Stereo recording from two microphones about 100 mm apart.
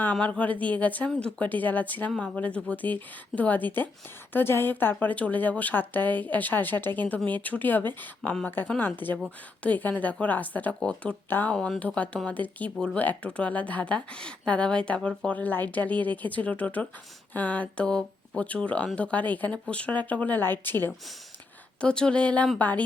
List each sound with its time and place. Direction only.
0.0 s speech: 15° left (ahead or behind)
11.5 s speech: 10° left (ahead or behind)
21.8 s speech: 10° left (ahead or behind)